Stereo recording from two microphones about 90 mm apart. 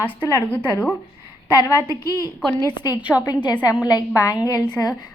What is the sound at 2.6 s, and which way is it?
Speech, 55° left (ahead or behind).